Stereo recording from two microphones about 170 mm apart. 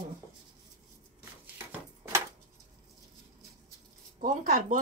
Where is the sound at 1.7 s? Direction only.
15° right (ahead or behind).